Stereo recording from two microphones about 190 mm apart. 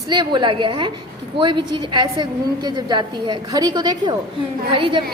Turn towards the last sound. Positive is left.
turn(degrees=-25)  # may be behind; listen again after turning